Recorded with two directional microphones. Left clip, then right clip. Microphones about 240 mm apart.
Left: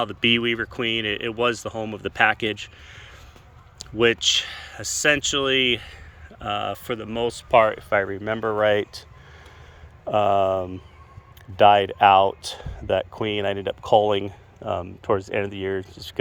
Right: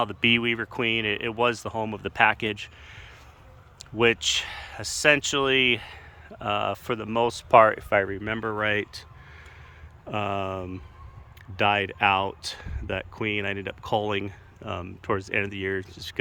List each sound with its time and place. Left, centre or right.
0.0 s speech: centre
3.9 s speech: centre
10.1 s speech: centre